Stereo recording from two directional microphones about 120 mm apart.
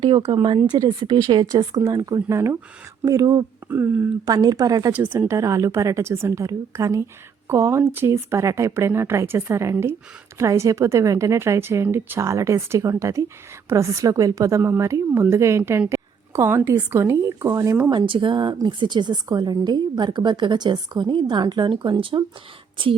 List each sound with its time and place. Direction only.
0.0 s a woman's voice: 35° right (ahead or behind)
3.7 s speech: 15° right (ahead or behind)
4.3 s a woman's voice: 30° right (ahead or behind)
4.9 s a woman's voice: 15° right (ahead or behind)
17.9 s a woman's voice: 45° right (ahead or behind)